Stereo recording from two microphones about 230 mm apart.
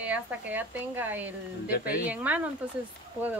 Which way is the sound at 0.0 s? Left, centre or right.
Centre.